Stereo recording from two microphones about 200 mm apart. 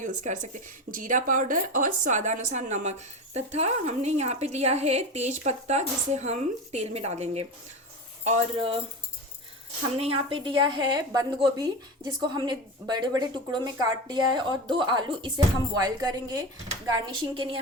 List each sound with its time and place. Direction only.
0.0 s a woman's voice: 40° right (ahead or behind)
10.0 s a woman's voice: 25° right (ahead or behind)